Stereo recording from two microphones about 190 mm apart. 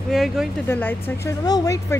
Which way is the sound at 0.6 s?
10° left (ahead or behind).